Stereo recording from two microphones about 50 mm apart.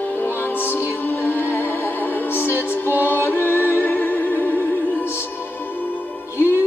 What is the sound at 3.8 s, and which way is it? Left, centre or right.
Music, left.